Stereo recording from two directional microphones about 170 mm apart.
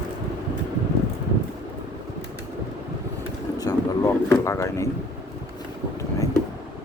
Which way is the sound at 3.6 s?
20° left (ahead or behind).